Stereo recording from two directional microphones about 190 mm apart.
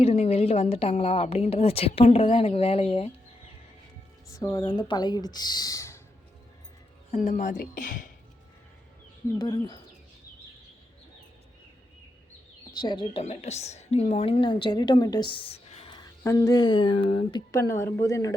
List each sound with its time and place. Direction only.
0.0 s a woman's voice: 30° left (ahead or behind)
4.3 s a woman's voice: 15° left (ahead or behind)
7.1 s speech: 40° left (ahead or behind)
9.4 s a woman's voice: 20° left (ahead or behind)
12.8 s a woman's voice: 25° left (ahead or behind)
16.2 s a woman's voice: 15° left (ahead or behind)
17.5 s a woman's voice: 15° left (ahead or behind)